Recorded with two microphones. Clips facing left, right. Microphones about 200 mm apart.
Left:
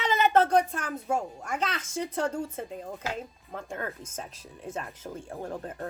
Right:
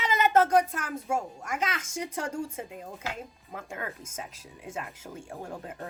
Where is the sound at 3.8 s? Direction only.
10° right (ahead or behind).